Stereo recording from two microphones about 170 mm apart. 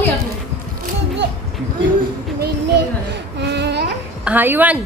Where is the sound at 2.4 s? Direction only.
85° right.